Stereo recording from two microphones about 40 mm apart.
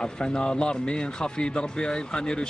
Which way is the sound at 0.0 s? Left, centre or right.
Left.